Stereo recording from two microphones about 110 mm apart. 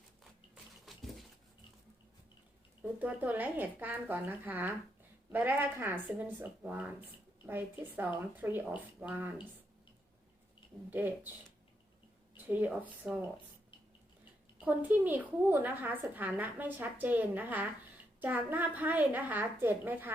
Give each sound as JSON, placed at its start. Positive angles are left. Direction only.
{"t": 0.5, "sound": "a sound", "side_deg": 0}
{"t": 3.0, "sound": "a woman's voice", "side_deg": -15}
{"t": 10.9, "sound": "a woman's voice", "side_deg": -15}
{"t": 12.5, "sound": "a woman's voice", "side_deg": -15}
{"t": 13.0, "sound": "speech", "side_deg": -5}
{"t": 14.6, "sound": "a woman's voice", "side_deg": -15}